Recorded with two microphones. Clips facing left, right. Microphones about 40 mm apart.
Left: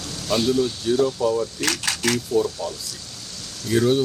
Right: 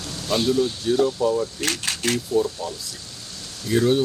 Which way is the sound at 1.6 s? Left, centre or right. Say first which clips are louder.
Left 2 dB; left.